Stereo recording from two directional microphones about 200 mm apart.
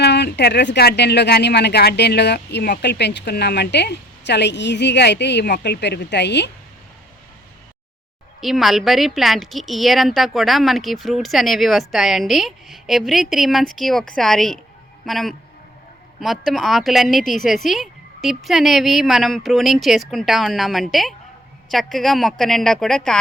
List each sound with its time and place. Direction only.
0.0 s speech: 55° left (ahead or behind)
8.4 s speech: centre (ahead or behind)